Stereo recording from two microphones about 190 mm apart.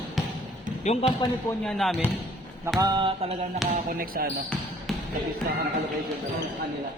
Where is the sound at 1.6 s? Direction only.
Centre (ahead or behind).